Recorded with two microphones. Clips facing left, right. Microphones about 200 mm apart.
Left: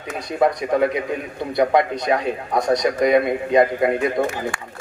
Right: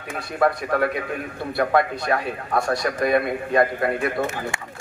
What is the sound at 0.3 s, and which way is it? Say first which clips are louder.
A woman's voice: left 3 dB; 20° left (ahead or behind).